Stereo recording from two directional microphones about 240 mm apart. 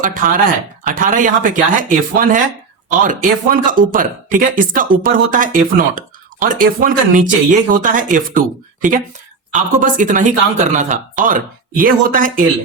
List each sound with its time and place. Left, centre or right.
0.0 s speech: right